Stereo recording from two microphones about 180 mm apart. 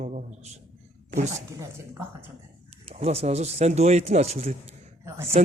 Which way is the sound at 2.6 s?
35° right (ahead or behind).